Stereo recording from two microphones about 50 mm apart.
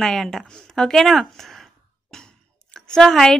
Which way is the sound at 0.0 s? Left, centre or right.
Centre.